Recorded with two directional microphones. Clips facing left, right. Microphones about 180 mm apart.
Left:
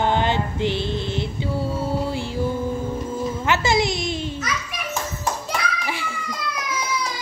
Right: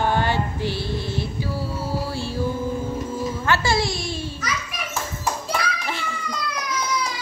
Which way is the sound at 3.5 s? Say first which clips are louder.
Left 2 dB; 20° left (ahead or behind).